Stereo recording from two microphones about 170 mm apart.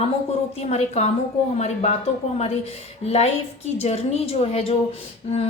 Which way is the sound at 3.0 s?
40° left (ahead or behind).